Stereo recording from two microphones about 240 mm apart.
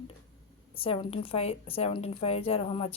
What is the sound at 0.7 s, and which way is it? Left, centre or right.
A woman's voice, left.